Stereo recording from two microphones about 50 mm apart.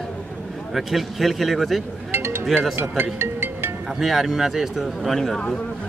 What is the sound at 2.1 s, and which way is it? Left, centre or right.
Music, right.